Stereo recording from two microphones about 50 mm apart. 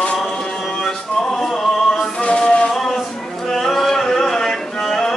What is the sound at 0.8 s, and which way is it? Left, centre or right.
Music, centre.